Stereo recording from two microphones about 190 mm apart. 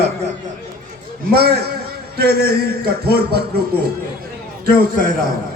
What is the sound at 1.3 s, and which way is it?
Speech, 55° right (ahead or behind).